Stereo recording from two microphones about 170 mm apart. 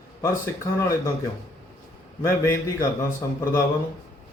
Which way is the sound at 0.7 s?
20° left (ahead or behind).